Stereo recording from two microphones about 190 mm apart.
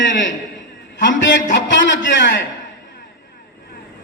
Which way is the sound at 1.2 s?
70° left (ahead or behind).